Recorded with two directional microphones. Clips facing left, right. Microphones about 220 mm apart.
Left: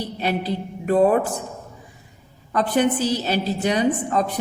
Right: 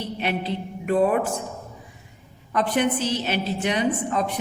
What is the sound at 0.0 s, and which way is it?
A woman's voice, 35° left (ahead or behind).